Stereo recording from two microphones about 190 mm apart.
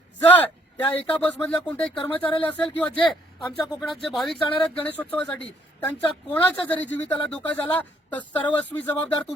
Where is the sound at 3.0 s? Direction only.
25° left (ahead or behind).